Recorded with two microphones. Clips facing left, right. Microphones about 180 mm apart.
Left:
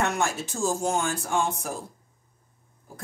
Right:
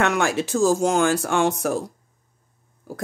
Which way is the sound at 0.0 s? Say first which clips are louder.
Right 6 dB; 90° right.